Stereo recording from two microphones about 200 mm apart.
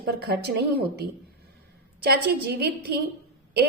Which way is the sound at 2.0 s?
50° right (ahead or behind).